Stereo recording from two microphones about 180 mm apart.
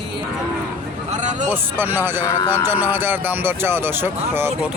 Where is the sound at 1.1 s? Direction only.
40° right (ahead or behind).